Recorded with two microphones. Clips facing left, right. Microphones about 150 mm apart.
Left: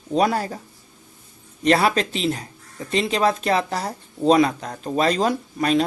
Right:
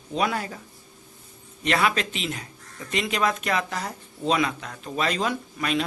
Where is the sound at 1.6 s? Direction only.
35° left (ahead or behind).